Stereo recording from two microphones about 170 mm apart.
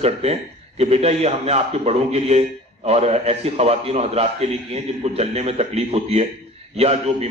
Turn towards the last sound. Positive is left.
turn(degrees=-35)  # may be behind; listen again after turning